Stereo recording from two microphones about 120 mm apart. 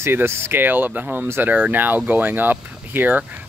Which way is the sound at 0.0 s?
20° right (ahead or behind).